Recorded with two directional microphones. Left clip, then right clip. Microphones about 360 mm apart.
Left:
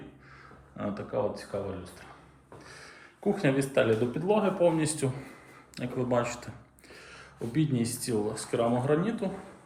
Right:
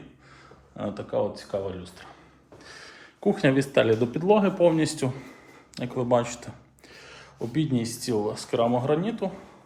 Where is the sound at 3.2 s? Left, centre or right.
Right.